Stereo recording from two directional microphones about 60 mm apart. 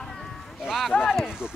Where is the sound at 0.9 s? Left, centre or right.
Left.